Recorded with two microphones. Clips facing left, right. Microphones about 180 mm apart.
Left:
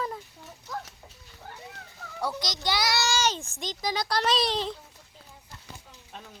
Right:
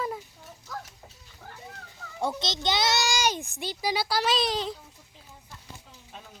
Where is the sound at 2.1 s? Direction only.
25° right (ahead or behind); by 4.8 s centre (ahead or behind).